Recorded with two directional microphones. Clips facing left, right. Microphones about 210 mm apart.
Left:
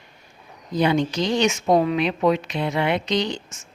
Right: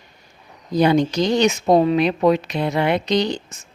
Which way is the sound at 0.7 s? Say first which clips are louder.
Right 4 dB; 40° right (ahead or behind).